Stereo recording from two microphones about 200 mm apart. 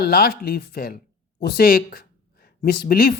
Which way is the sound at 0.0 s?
50° left (ahead or behind).